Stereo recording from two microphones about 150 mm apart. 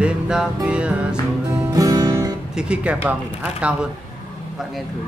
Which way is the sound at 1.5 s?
20° right (ahead or behind).